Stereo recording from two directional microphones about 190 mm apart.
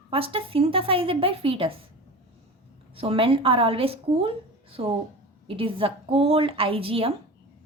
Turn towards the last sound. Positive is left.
turn(degrees=-30)  # may be behind; listen again after turning